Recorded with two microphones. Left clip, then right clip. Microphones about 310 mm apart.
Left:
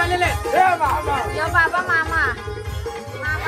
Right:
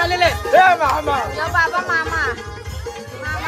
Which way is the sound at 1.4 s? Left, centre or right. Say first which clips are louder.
Left 2 dB; centre.